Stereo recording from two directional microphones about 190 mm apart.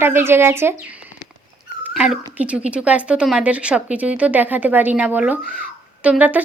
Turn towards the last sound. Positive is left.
turn(degrees=-10)  # may be behind; listen again after turning